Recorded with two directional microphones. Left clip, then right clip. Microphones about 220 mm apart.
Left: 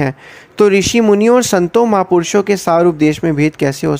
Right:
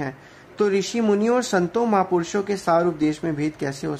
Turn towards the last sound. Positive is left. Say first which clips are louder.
# left 12 dB
turn(degrees=35)  # may be behind; listen again after turning